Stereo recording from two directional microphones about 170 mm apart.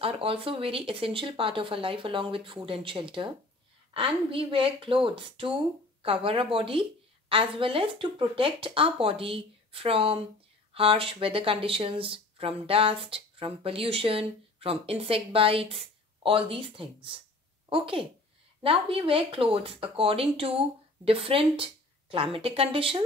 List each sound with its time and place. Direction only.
0.0 s a woman's voice: 35° right (ahead or behind)